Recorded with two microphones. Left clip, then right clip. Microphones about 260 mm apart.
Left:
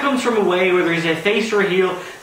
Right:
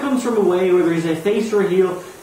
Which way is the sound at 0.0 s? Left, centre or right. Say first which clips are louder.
Left 1 dB; centre.